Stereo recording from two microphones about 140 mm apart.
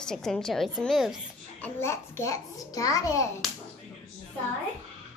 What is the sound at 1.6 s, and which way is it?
A child's voice, 15° left (ahead or behind).